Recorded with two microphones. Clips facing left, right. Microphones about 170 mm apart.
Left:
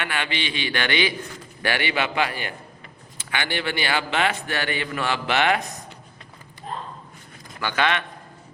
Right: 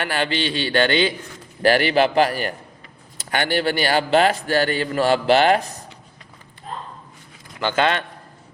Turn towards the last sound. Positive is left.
turn(degrees=-30)  # may be behind; listen again after turning